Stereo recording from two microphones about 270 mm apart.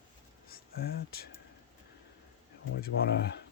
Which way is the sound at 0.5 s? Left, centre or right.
Left.